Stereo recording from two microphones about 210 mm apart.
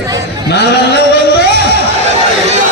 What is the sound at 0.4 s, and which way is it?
Speech, 50° left (ahead or behind).